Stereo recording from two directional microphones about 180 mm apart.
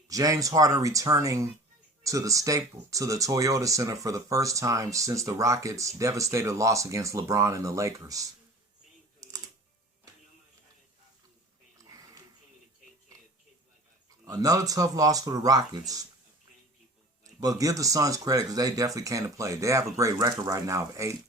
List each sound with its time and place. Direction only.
0.1 s speech: 20° right (ahead or behind)
11.8 s a sound: 20° right (ahead or behind)
14.3 s speech: 20° right (ahead or behind)
17.2 s speech: 20° right (ahead or behind)